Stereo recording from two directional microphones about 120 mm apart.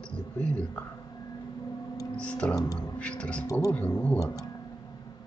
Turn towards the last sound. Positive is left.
turn(degrees=30)  # may be behind; listen again after turning